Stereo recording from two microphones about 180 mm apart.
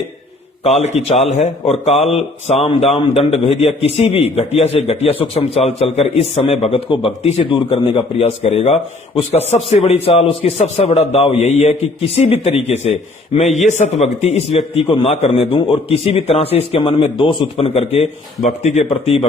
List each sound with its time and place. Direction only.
0.8 s a man's voice: 40° left (ahead or behind)